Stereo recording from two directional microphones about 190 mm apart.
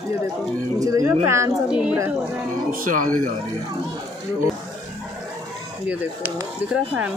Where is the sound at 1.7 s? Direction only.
5° right (ahead or behind).